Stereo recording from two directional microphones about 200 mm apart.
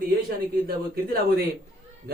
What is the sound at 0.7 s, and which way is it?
Speech, 50° right (ahead or behind).